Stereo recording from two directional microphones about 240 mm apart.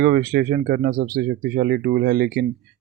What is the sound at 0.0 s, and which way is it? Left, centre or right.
Speech, right.